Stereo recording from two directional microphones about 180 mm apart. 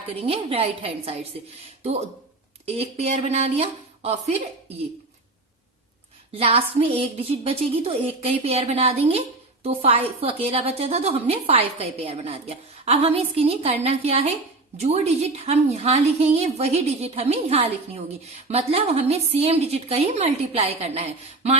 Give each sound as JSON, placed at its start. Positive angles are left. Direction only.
{"t": 0.2, "sound": "a woman's voice", "side_deg": -35}
{"t": 6.3, "sound": "a woman's voice", "side_deg": -30}